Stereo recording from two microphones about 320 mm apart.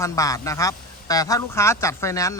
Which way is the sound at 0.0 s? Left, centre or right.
Centre.